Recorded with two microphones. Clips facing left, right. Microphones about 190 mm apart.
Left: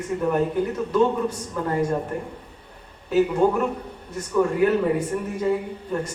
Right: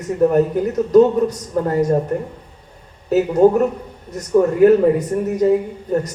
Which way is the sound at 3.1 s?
40° right (ahead or behind).